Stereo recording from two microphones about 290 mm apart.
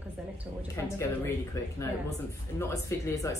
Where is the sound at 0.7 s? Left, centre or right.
Centre.